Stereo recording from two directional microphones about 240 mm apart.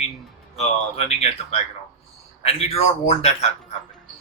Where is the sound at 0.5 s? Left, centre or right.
Left.